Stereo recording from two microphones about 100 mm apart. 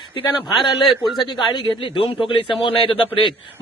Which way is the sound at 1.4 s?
50° left (ahead or behind).